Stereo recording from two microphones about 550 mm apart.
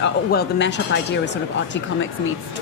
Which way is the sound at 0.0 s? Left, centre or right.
Centre.